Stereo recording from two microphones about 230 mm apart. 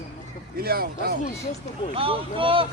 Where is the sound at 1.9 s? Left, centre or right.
Right.